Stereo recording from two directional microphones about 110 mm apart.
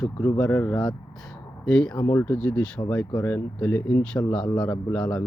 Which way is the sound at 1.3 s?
5° left (ahead or behind).